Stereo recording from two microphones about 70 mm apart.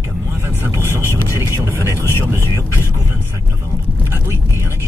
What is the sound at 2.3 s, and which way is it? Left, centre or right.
Vehicle, right.